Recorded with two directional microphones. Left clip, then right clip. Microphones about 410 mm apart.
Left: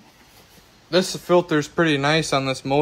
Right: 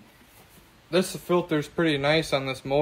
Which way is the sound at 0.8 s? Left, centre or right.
Centre.